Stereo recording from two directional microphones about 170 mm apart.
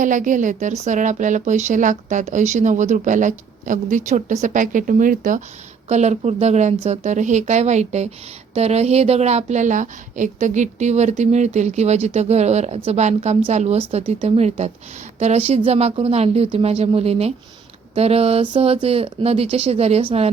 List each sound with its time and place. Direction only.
0.0 s a woman's voice: 50° right (ahead or behind)